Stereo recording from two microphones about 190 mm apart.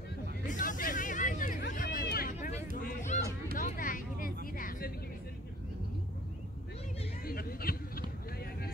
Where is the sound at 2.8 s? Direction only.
40° left (ahead or behind).